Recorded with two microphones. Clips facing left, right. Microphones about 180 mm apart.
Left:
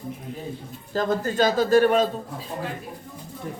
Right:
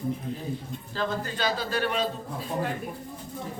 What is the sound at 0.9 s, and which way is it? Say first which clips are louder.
A man's voice: left 8 dB; 45° left (ahead or behind).